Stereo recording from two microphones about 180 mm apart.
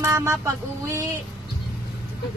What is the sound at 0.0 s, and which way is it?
Speech, 15° right (ahead or behind).